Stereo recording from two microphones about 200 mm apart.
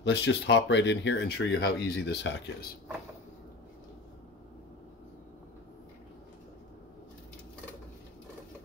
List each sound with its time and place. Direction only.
0.0 s speech: 60° left (ahead or behind)